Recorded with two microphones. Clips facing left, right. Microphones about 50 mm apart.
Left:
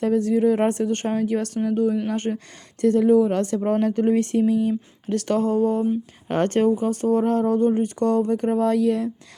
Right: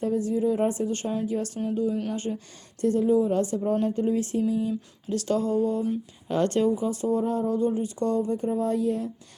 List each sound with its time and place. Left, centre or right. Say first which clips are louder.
0.0 s a woman's voice: left 6 dB; left
5.0 s speech: left 4 dB; left